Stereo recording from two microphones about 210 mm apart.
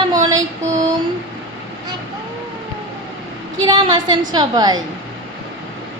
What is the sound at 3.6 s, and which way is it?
A woman's voice, 20° right (ahead or behind).